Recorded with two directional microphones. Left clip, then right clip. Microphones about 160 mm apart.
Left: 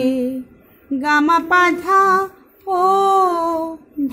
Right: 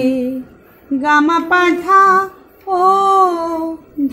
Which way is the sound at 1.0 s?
40° left (ahead or behind).